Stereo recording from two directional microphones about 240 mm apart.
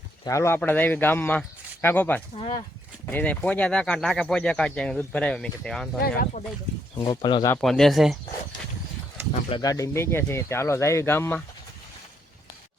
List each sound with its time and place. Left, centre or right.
0.3 s speech: centre
6.0 s speech: left
6.9 s speech: centre
7.6 s speech: centre
9.5 s speech: centre